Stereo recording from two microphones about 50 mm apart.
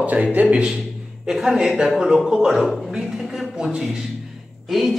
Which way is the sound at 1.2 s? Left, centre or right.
Centre.